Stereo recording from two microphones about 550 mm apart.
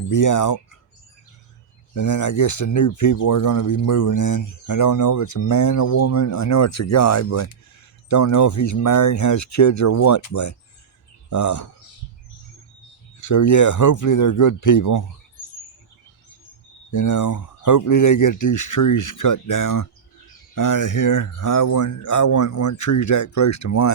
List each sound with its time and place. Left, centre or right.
0.1 s speech: left
2.0 s speech: left
13.1 s speech: left
16.9 s speech: left